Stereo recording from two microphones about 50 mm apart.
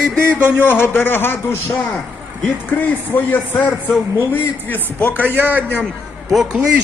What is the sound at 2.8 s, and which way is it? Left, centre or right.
A man's voice, left.